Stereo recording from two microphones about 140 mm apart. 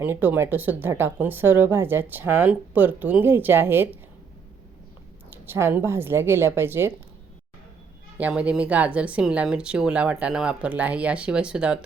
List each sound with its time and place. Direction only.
0.0 s speech: 15° right (ahead or behind)
5.3 s speech: 15° right (ahead or behind)
8.2 s speech: 10° right (ahead or behind)